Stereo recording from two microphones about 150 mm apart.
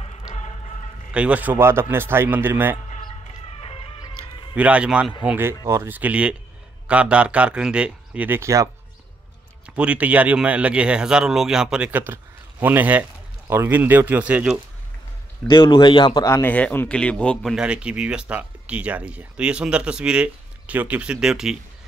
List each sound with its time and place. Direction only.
1.1 s a man's voice: 10° right (ahead or behind)
3.5 s music: 40° left (ahead or behind)
4.6 s a man's voice: 10° right (ahead or behind)
9.8 s a man's voice: 10° right (ahead or behind)
15.4 s a man's voice: 30° left (ahead or behind)
16.3 s a man's voice: 15° left (ahead or behind); by 21.5 s 5° right (ahead or behind)